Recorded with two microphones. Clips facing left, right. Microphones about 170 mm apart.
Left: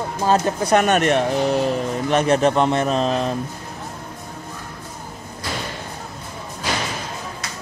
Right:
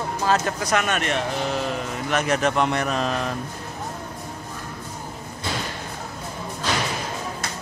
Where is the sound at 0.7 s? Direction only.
40° left (ahead or behind).